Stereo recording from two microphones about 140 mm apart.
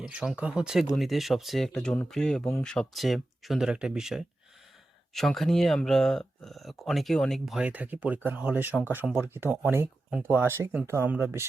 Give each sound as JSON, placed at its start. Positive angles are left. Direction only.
{"t": 0.0, "sound": "speech", "side_deg": -5}